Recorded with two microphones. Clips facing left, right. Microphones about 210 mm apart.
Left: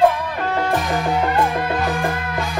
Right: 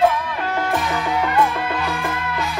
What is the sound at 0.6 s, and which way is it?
Music, 40° left (ahead or behind).